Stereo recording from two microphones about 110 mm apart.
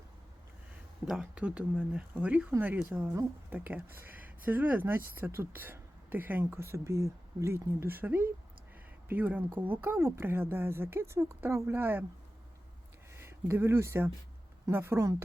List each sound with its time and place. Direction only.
1.0 s speech: 5° right (ahead or behind)
13.1 s speech: 20° right (ahead or behind)